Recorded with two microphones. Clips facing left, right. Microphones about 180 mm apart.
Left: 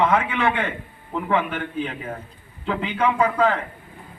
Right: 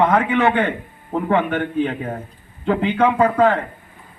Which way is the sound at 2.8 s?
30° right (ahead or behind).